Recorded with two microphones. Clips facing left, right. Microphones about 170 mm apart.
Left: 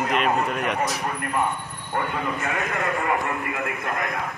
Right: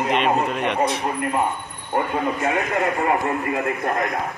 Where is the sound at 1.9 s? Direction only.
25° right (ahead or behind).